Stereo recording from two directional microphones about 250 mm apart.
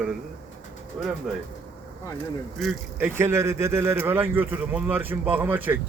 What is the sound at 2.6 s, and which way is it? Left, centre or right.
Speech, centre.